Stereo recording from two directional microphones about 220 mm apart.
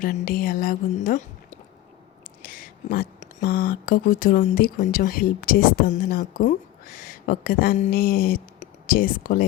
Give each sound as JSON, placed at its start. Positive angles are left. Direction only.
{"t": 0.0, "sound": "a woman's voice", "side_deg": 40}